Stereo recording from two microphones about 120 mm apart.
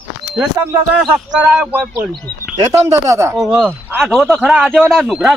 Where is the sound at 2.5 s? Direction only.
20° right (ahead or behind).